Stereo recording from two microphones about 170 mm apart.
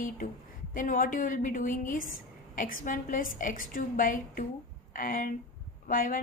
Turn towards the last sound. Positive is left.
turn(degrees=50)  # may be behind; listen again after turning